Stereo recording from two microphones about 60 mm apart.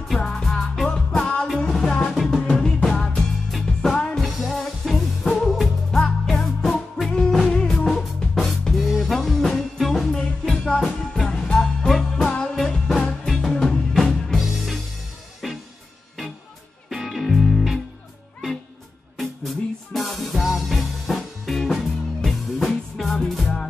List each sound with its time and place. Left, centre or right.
0.1 s music: centre
12.2 s music: centre
12.5 s music: centre
15.4 s music: centre
16.9 s music: centre
19.1 s music: centre